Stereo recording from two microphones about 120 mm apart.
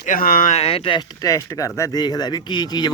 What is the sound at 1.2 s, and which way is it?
Speech, 25° left (ahead or behind).